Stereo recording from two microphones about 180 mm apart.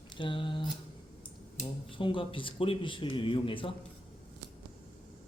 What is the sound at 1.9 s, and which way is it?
A man's voice, 30° left (ahead or behind).